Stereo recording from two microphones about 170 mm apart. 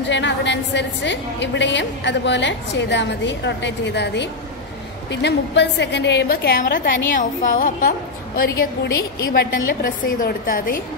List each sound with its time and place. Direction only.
0.1 s a woman's voice: 90° left; by 10.8 s 55° left (ahead or behind)